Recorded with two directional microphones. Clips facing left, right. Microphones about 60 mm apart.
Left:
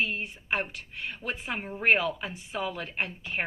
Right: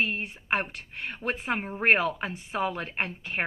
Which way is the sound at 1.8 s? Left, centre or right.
Right.